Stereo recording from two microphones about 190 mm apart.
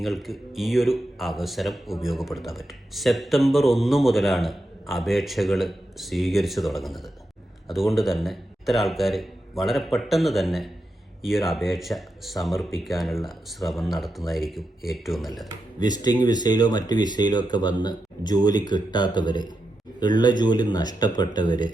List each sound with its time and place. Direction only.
0.0 s speech: centre (ahead or behind)
15.8 s speech: 20° left (ahead or behind)